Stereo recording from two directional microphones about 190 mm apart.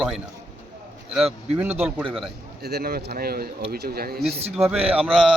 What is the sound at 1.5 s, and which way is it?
Speech, 10° right (ahead or behind).